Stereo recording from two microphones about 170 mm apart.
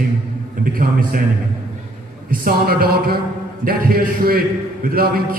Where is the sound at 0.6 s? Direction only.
55° right (ahead or behind).